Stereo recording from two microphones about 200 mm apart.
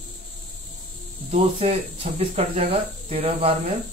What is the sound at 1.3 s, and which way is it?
Speech, 30° right (ahead or behind).